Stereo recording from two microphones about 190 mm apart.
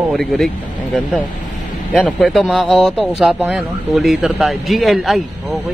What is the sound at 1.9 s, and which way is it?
Speech, centre (ahead or behind).